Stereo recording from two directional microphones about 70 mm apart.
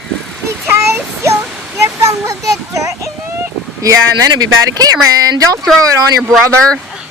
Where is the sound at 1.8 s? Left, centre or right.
Right.